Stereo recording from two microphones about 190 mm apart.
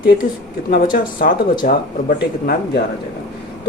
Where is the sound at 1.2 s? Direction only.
50° left (ahead or behind).